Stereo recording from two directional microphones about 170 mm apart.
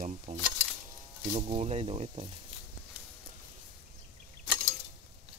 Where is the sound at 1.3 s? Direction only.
40° right (ahead or behind).